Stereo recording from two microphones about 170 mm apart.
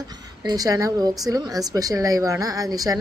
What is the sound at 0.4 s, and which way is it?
Speech, 20° right (ahead or behind).